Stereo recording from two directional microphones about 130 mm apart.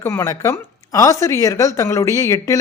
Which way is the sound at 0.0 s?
15° left (ahead or behind).